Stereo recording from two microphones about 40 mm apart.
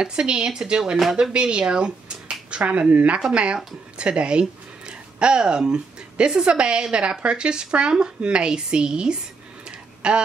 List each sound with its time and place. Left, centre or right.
0.0 s speech: right
3.2 s speech: right
9.7 s a sound: right